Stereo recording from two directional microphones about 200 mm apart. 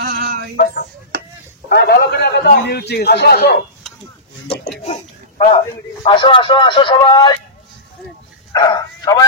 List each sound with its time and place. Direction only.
0.0 s music: 50° right (ahead or behind)
1.1 s a sound: 55° right (ahead or behind)
1.7 s a man's voice: 55° left (ahead or behind)
4.8 s a sound: 30° left (ahead or behind)
6.0 s speech: 25° left (ahead or behind)
8.5 s bow-wow: 20° left (ahead or behind)